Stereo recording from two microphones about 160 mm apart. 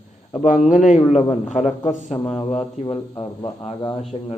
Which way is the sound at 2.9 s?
25° left (ahead or behind).